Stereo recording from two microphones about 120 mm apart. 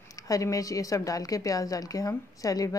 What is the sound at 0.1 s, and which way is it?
A woman's voice, 30° left (ahead or behind).